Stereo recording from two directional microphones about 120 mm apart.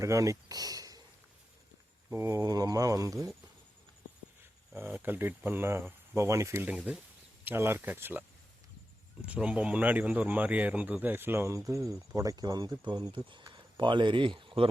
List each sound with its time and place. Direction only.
0.0 s speech: 25° right (ahead or behind)
2.0 s speech: 20° right (ahead or behind)
4.7 s speech: 15° right (ahead or behind)
6.7 s speech: 10° right (ahead or behind)
9.2 s speech: 10° right (ahead or behind); by 14.7 s 45° right (ahead or behind)